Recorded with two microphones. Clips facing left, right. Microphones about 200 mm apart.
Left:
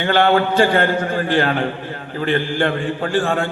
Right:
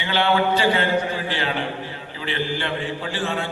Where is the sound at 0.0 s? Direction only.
50° left (ahead or behind).